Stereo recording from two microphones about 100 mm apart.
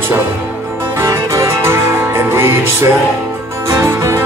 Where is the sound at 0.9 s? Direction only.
30° right (ahead or behind).